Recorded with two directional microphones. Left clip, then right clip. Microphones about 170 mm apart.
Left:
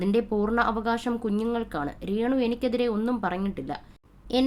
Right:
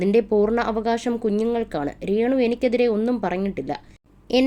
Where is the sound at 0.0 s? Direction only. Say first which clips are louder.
Right 7 dB; 15° right (ahead or behind).